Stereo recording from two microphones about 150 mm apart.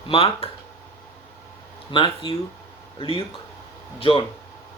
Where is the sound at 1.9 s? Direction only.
35° left (ahead or behind).